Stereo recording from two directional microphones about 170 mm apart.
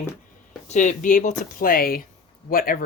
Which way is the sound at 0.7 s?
45° left (ahead or behind).